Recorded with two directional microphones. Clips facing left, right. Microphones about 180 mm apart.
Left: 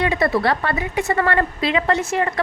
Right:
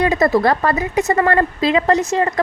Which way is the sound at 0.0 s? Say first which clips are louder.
Right 4 dB; 40° right (ahead or behind).